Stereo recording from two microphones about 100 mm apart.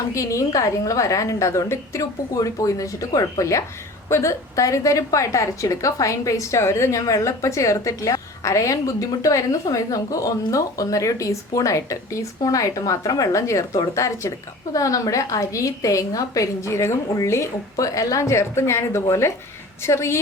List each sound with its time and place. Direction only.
0.1 s a woman's voice: 30° left (ahead or behind)